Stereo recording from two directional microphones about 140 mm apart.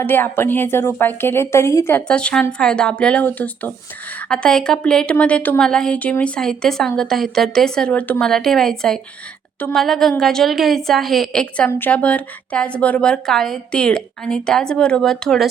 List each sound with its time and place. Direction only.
0.0 s a woman's voice: 15° left (ahead or behind)